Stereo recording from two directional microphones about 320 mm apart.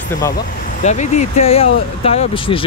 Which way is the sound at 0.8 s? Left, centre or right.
Left.